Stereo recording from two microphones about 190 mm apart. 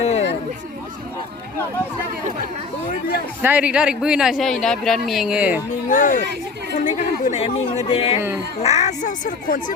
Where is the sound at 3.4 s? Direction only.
10° right (ahead or behind).